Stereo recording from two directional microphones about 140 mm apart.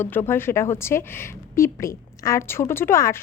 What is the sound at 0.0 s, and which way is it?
A woman's voice, 15° left (ahead or behind).